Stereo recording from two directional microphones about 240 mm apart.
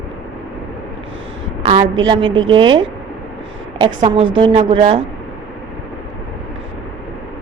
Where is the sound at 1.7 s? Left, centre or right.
Right.